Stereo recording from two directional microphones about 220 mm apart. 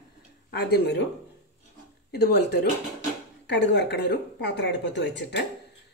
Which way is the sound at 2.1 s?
50° left (ahead or behind).